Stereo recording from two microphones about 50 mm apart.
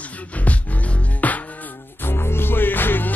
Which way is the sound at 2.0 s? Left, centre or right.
Left.